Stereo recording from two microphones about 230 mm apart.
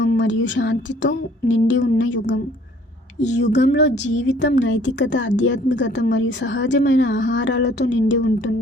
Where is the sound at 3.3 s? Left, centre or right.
Left.